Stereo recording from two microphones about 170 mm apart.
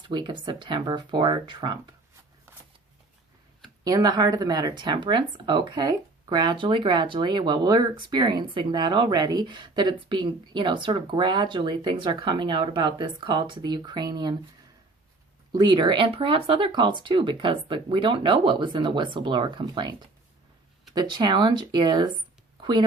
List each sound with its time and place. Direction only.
0.0 s speech: 25° right (ahead or behind)
3.8 s speech: 25° right (ahead or behind)
15.5 s speech: 25° right (ahead or behind)